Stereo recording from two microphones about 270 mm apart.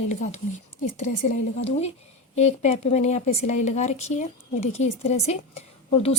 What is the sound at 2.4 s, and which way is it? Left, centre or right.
Speech, left.